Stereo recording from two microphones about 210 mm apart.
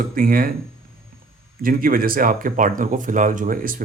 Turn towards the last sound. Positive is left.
turn(degrees=-40)  # may be behind; listen again after turning